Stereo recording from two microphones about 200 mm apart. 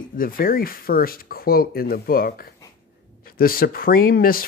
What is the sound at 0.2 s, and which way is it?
Speech, 45° left (ahead or behind).